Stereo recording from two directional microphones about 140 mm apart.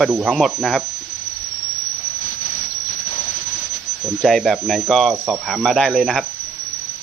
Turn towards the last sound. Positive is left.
turn(degrees=0)  # may be behind; listen again after turning